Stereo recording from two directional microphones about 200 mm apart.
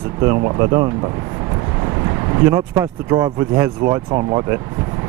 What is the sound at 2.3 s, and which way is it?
Speech, 15° right (ahead or behind).